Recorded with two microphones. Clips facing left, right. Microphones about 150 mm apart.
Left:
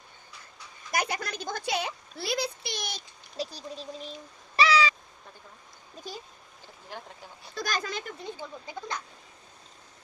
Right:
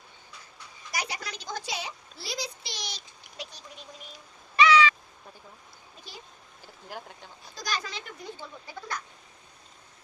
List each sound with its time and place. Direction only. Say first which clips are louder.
0.9 s speech: left 5 dB; 50° left (ahead or behind)
3.3 s speech: left 9 dB; 35° left (ahead or behind)
4.5 s cat: right 3 dB; 35° left (ahead or behind)
7.5 s speech: left 3 dB; 50° left (ahead or behind)
8.2 s speech: left 3 dB; 20° left (ahead or behind)